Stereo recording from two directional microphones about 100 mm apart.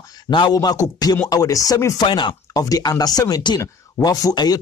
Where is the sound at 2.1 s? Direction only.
55° left (ahead or behind).